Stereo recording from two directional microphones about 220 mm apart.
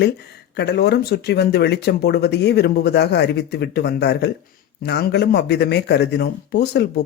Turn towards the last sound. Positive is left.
turn(degrees=50)  # may be behind; listen again after turning